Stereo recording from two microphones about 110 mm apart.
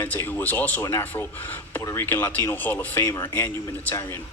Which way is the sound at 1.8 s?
30° left (ahead or behind).